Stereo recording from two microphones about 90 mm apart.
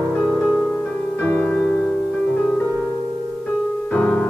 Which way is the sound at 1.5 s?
10° left (ahead or behind).